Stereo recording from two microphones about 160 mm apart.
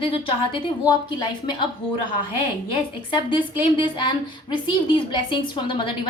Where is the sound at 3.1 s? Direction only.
30° left (ahead or behind).